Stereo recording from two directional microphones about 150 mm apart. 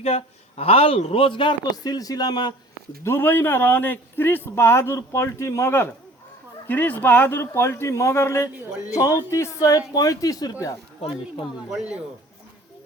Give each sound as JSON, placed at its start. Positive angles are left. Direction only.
{"t": 0.0, "sound": "a man's voice", "side_deg": 45}
{"t": 3.0, "sound": "a man's voice", "side_deg": 15}
{"t": 11.5, "sound": "speech", "side_deg": -5}